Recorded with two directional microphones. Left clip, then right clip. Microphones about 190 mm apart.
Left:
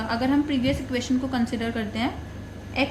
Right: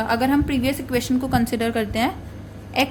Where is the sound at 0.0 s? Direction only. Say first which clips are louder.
Right 4 dB; 55° right (ahead or behind).